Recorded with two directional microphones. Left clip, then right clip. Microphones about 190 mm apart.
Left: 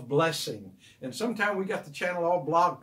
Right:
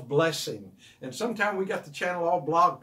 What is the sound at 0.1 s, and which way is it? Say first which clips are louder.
Speech: right 1 dB; centre (ahead or behind).